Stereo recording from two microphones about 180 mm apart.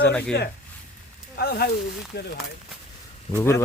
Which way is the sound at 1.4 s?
60° left (ahead or behind).